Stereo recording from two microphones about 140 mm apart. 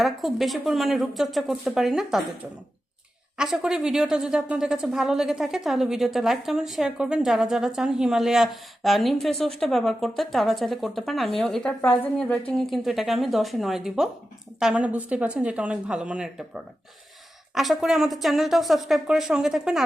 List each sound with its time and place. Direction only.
0.0 s a woman's voice: centre (ahead or behind)
3.3 s a woman's voice: 5° right (ahead or behind); by 12.4 s 10° left (ahead or behind)
12.5 s a woman's voice: centre (ahead or behind)